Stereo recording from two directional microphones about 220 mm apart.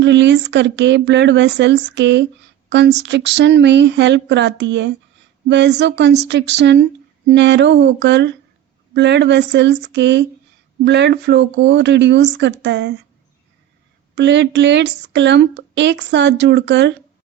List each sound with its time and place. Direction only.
0.0 s speech: 50° right (ahead or behind)
14.2 s speech: 50° right (ahead or behind)